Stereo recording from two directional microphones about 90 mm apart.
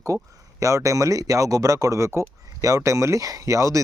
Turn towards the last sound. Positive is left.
turn(degrees=-35)  # may be behind; listen again after turning